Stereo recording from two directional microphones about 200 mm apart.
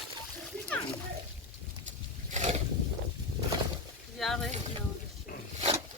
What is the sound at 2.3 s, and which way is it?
Boat, 35° right (ahead or behind).